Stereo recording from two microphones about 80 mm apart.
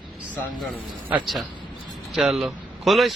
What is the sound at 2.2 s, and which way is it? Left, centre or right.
Speech, centre.